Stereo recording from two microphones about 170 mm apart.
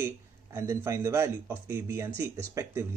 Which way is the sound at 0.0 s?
15° right (ahead or behind).